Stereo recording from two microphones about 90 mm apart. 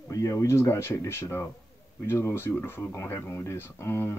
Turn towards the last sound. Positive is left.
turn(degrees=30)  # may be behind; listen again after turning